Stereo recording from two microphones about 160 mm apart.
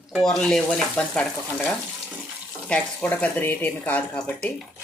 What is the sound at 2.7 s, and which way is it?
Speech, 10° left (ahead or behind).